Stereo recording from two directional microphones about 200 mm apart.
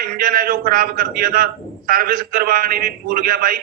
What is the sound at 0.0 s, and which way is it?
A man's voice, 45° right (ahead or behind).